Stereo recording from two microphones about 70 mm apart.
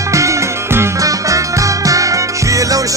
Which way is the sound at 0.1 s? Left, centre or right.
Right.